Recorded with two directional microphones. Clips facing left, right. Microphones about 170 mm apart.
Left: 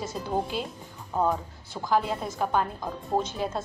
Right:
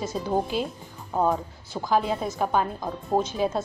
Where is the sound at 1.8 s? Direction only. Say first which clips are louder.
Right 2 dB; 20° right (ahead or behind).